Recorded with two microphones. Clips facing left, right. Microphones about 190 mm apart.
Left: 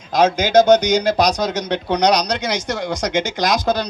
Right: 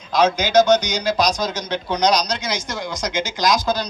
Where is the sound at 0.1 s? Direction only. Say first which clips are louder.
Left 2 dB; 50° left (ahead or behind).